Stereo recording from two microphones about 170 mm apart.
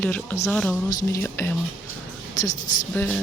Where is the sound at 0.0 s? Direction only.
10° left (ahead or behind).